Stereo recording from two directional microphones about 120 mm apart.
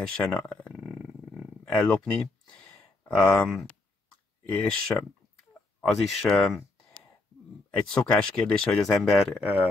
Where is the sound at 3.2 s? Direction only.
5° left (ahead or behind).